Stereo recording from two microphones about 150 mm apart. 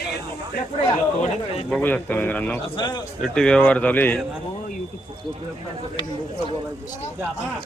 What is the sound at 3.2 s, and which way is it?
Speech, 5° left (ahead or behind).